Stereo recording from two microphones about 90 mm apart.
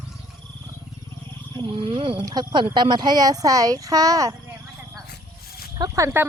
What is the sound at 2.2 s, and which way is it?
Speech, 50° right (ahead or behind).